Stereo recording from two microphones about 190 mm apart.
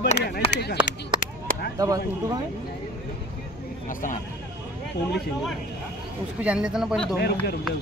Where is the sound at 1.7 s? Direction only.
20° right (ahead or behind).